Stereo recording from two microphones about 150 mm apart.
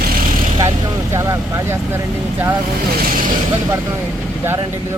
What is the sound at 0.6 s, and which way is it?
Speech, 20° right (ahead or behind).